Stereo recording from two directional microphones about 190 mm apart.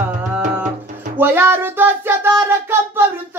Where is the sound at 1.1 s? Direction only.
10° right (ahead or behind).